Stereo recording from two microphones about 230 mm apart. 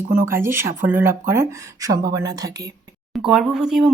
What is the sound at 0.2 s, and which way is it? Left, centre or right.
Speech, centre.